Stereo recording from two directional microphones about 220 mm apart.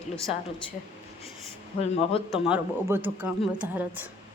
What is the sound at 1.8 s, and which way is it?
Speech, 30° left (ahead or behind).